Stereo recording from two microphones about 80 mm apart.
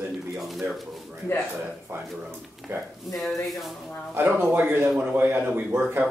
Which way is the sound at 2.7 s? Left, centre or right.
Right.